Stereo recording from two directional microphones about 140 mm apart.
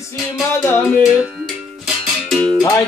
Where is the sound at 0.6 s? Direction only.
20° left (ahead or behind).